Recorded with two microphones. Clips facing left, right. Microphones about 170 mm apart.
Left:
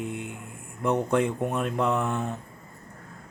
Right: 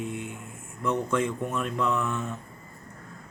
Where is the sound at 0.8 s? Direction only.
60° left (ahead or behind).